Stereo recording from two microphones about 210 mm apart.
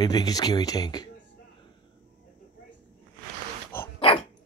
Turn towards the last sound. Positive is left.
turn(degrees=25)  # may be behind; listen again after turning